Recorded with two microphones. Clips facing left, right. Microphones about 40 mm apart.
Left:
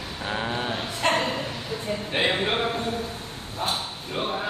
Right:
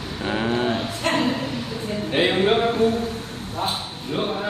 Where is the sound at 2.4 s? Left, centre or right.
Centre.